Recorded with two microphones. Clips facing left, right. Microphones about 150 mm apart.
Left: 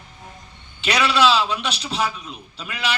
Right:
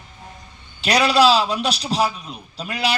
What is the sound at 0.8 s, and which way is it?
A man's voice, 40° right (ahead or behind).